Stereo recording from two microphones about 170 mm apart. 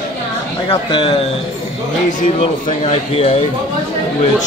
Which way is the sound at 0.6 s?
30° left (ahead or behind).